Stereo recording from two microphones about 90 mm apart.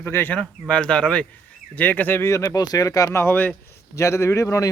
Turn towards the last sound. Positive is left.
turn(degrees=35)  # may be behind; listen again after turning